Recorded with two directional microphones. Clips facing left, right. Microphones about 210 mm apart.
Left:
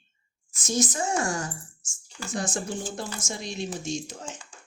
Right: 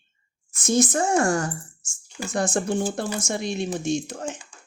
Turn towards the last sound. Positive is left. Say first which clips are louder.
# right 7 dB
turn(degrees=-60)  # may be behind; listen again after turning